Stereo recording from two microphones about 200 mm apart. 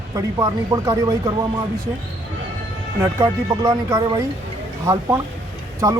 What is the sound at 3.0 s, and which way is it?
Speech, 15° right (ahead or behind).